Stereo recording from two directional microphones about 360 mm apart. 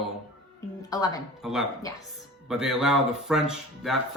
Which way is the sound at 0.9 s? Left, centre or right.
Centre.